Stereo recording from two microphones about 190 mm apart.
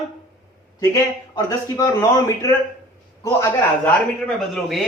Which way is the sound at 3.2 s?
10° left (ahead or behind).